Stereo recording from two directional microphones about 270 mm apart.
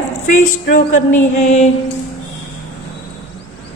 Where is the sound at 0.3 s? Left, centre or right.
Left.